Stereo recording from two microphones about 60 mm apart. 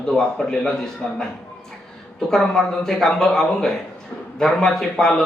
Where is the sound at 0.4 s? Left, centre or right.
Centre.